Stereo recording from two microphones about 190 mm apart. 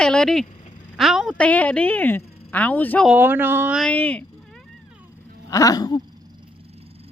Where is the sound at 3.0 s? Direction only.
10° right (ahead or behind).